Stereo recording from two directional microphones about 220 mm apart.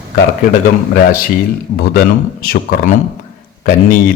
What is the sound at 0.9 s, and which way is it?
A man's voice, 40° left (ahead or behind).